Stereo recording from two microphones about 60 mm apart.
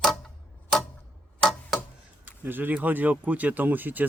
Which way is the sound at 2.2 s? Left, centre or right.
Right.